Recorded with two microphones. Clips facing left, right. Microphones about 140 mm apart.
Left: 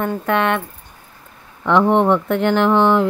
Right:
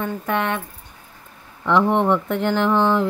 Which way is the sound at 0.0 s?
75° left (ahead or behind).